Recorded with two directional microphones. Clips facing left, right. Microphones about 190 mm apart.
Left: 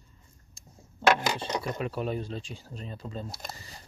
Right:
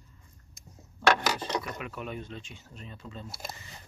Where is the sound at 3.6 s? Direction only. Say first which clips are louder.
Left 1 dB; 35° left (ahead or behind).